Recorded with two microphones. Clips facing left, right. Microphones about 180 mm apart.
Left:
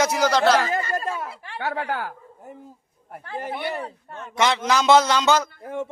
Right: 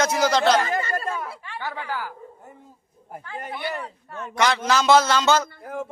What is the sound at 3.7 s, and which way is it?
A man's voice, 30° left (ahead or behind).